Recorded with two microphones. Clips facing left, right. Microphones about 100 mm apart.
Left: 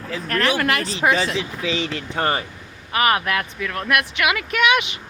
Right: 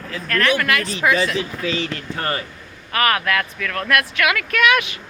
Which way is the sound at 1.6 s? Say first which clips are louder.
Even; 20° left (ahead or behind).